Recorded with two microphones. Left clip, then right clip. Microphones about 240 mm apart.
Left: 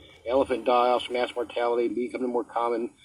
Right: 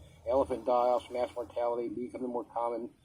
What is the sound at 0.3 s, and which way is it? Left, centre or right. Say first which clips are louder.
Speech: left 5 dB; left.